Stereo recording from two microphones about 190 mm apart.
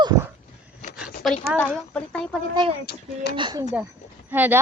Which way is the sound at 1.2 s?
Centre (ahead or behind).